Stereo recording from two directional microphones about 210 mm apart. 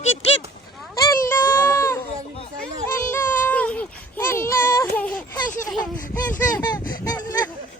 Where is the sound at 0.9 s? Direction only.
15° left (ahead or behind).